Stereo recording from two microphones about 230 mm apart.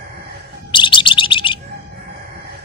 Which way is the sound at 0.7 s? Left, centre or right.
Left.